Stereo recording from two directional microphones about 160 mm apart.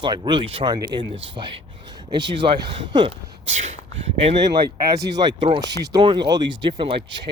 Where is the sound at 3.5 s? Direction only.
40° right (ahead or behind).